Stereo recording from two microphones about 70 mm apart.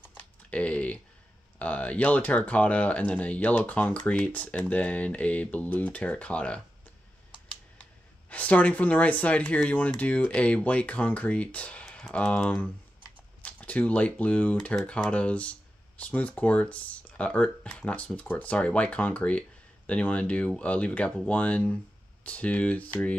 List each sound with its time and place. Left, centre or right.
0.0 s typing: left
1.6 s speech: centre
8.3 s speech: left